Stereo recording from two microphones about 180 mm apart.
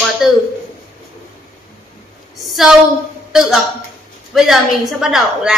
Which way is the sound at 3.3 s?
Centre (ahead or behind).